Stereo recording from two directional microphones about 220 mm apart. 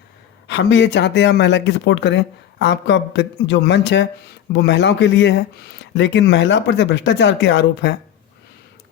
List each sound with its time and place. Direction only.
0.4 s speech: 55° left (ahead or behind)